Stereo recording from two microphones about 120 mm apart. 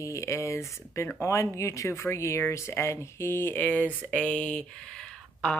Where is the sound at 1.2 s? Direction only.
25° left (ahead or behind).